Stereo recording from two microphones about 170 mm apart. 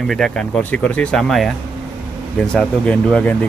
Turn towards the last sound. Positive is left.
turn(degrees=5)  # may be behind; listen again after turning